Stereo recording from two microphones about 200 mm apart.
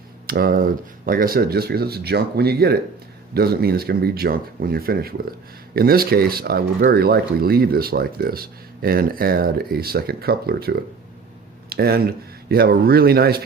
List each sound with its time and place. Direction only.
0.3 s speech: 45° right (ahead or behind)